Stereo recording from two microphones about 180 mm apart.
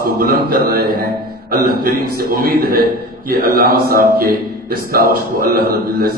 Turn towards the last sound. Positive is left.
turn(degrees=-55)  # may be behind; listen again after turning